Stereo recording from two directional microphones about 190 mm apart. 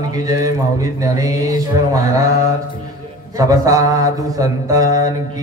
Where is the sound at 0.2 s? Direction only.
20° right (ahead or behind).